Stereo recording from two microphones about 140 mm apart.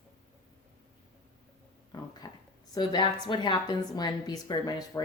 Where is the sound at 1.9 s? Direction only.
30° left (ahead or behind).